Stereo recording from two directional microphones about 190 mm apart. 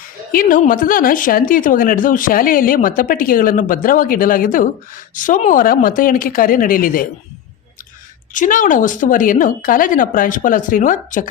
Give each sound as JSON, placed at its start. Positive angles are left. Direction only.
{"t": 0.3, "sound": "speech", "side_deg": 45}
{"t": 8.3, "sound": "speech", "side_deg": 45}